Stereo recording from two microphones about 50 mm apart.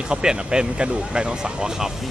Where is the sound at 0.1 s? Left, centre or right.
Centre.